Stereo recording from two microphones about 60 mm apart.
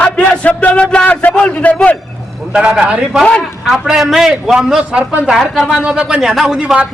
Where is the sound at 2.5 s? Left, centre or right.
Centre.